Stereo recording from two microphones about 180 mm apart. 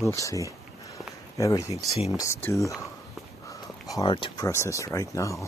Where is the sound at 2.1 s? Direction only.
15° left (ahead or behind).